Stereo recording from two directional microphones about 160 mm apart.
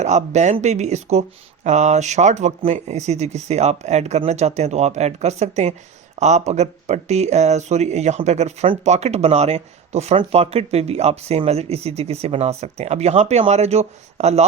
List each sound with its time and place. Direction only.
0.0 s speech: 45° right (ahead or behind)